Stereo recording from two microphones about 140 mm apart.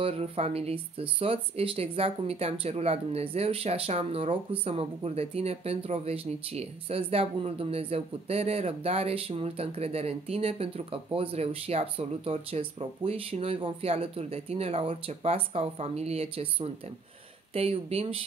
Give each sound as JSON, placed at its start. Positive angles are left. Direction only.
{"t": 0.0, "sound": "speech", "side_deg": -45}